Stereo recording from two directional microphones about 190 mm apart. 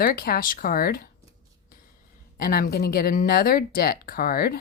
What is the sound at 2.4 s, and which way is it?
Speech, 50° left (ahead or behind).